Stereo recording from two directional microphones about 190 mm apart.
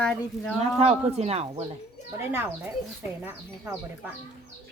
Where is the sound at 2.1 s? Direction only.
10° right (ahead or behind).